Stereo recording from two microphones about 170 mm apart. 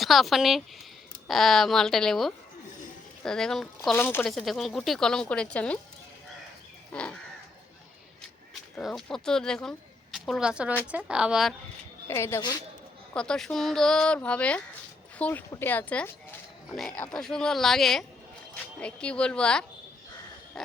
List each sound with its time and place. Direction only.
0.0 s speech: centre (ahead or behind)
3.9 s speech: 15° left (ahead or behind)
4.2 s speech: centre (ahead or behind)
6.9 s speech: 5° left (ahead or behind)
8.7 s a woman's voice: centre (ahead or behind)
12.0 s speech: 15° left (ahead or behind)
13.1 s speech: 5° left (ahead or behind)